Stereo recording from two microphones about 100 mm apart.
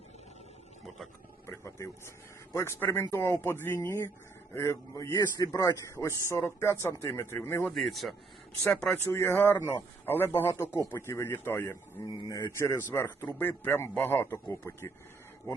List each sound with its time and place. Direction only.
1.5 s a sound: 30° left (ahead or behind)
2.5 s a man's voice: 30° left (ahead or behind)
5.1 s a man's voice: 40° left (ahead or behind)
7.8 s speech: centre (ahead or behind)
9.1 s a man's voice: 25° left (ahead or behind)
12.0 s a man's voice: 40° left (ahead or behind)